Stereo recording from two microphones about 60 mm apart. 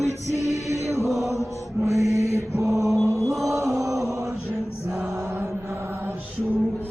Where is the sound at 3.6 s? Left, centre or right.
Right.